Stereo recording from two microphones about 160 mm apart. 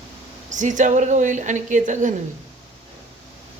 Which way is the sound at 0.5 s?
50° right (ahead or behind).